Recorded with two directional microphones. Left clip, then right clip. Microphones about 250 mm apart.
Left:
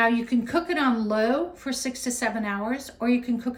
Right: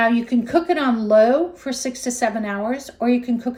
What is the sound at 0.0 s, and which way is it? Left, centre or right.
Speech, centre.